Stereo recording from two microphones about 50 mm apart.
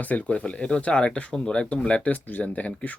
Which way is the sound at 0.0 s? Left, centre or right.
Left.